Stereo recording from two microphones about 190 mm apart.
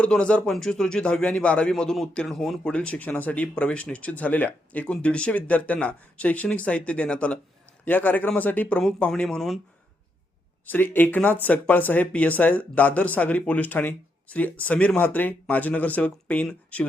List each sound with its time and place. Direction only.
0.0 s a man's voice: 5° left (ahead or behind)
10.7 s a man's voice: 10° left (ahead or behind)